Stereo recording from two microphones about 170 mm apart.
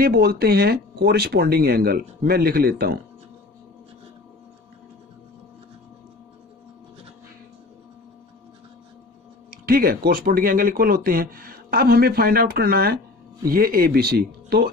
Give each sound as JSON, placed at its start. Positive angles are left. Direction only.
{"t": 0.0, "sound": "speech", "side_deg": -65}
{"t": 9.5, "sound": "speech", "side_deg": -60}